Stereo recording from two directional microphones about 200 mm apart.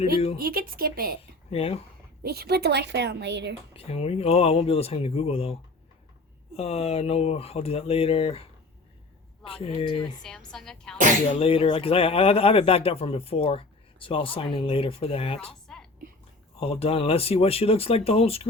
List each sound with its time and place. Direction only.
0.3 s speech: 50° right (ahead or behind)
1.5 s speech: 30° left (ahead or behind)
2.2 s a woman's voice: 50° right (ahead or behind)
3.8 s speech: 30° left (ahead or behind)
6.6 s speech: 30° left (ahead or behind)
10.2 s a woman's voice: 5° left (ahead or behind)
11.3 s speech: 30° left (ahead or behind)
15.6 s a sound: 5° left (ahead or behind)
16.6 s speech: 30° left (ahead or behind)